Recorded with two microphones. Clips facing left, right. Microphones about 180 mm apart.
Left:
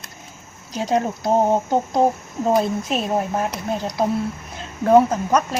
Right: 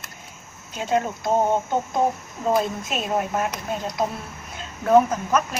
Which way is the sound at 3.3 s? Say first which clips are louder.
Left 2 dB; 30° left (ahead or behind).